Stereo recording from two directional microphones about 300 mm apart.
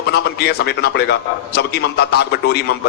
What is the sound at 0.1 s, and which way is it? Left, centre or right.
A man's voice, left.